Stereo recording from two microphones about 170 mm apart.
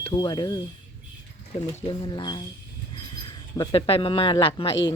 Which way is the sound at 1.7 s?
30° left (ahead or behind).